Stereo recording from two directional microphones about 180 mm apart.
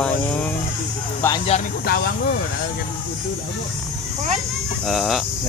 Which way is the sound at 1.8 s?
65° left (ahead or behind).